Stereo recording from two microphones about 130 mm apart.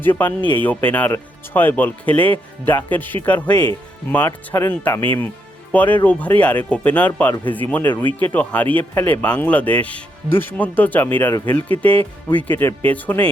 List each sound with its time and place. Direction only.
0.0 s speech: 15° left (ahead or behind)